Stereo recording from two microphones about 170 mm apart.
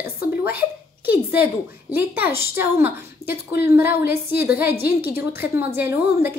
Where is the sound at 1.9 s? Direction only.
10° right (ahead or behind).